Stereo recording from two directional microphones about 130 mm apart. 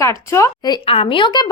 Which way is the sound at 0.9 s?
45° left (ahead or behind).